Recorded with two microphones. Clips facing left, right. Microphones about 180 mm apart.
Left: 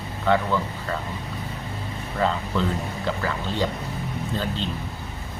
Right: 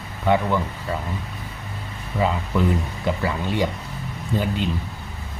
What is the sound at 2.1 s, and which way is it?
Speech, 10° right (ahead or behind).